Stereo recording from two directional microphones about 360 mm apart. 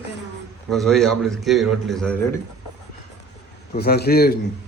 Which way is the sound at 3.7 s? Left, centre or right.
Left.